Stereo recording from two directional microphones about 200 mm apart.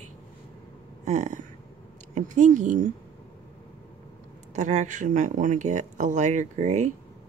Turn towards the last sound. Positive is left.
turn(degrees=-35)  # may be behind; listen again after turning